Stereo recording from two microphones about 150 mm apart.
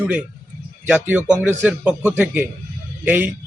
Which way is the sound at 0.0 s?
5° right (ahead or behind).